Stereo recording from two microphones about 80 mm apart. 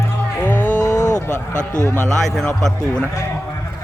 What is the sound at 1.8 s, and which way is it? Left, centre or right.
Speech, left.